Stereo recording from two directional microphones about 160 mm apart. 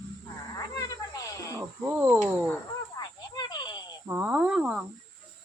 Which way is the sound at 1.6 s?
15° right (ahead or behind).